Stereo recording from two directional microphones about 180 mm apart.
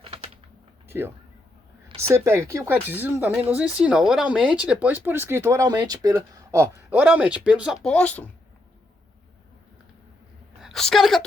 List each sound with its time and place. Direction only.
0.0 s a sound: 35° right (ahead or behind)
0.9 s speech: 15° right (ahead or behind); by 8.3 s 10° left (ahead or behind)
10.6 s a woman's voice: centre (ahead or behind)